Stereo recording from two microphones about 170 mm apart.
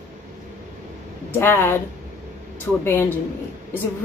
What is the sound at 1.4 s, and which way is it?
A woman's voice, 15° left (ahead or behind).